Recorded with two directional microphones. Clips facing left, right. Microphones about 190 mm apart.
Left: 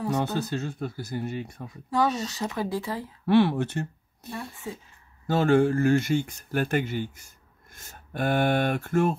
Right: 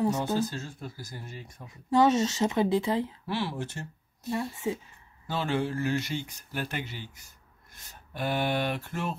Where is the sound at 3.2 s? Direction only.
60° left (ahead or behind).